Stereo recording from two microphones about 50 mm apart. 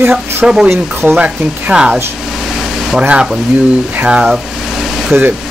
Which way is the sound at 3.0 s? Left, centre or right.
Right.